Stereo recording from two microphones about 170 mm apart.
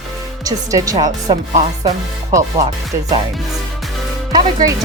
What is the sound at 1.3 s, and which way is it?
Music, 40° right (ahead or behind).